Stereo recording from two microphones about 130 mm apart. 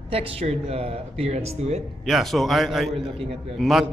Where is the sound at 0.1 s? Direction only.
50° right (ahead or behind).